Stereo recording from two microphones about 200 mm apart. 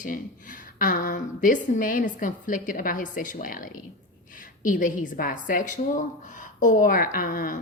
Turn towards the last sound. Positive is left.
turn(degrees=45)  # may be behind; listen again after turning